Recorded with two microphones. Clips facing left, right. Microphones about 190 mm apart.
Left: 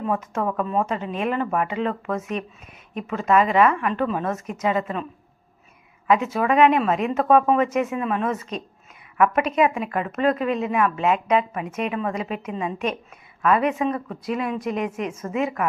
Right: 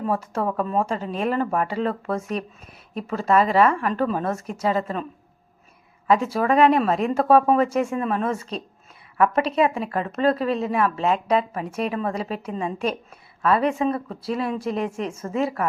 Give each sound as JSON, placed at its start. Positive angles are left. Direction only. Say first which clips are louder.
{"t": 0.0, "sound": "speech", "louder": "even", "side_deg": -35}
{"t": 6.1, "sound": "speech", "louder": "even", "side_deg": -35}